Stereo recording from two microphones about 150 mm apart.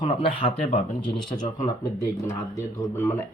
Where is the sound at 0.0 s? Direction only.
35° left (ahead or behind).